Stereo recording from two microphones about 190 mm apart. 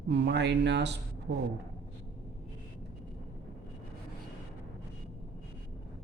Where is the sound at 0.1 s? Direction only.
65° right (ahead or behind).